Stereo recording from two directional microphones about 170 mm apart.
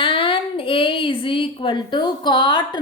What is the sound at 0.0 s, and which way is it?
A woman's voice, 30° left (ahead or behind).